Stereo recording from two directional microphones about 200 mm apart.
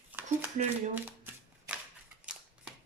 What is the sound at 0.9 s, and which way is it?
Shuffling cards, 10° right (ahead or behind).